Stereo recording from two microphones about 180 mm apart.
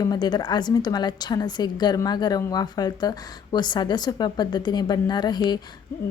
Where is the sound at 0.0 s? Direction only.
25° left (ahead or behind).